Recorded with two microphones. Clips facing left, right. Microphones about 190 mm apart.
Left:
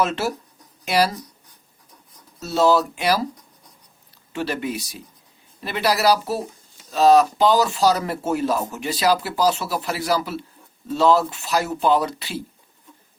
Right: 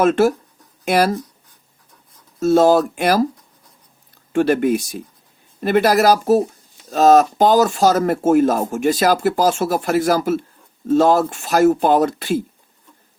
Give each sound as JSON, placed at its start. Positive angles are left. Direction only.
{"t": 0.0, "sound": "speech", "side_deg": -50}
{"t": 2.4, "sound": "speech", "side_deg": -50}
{"t": 4.3, "sound": "speech", "side_deg": -50}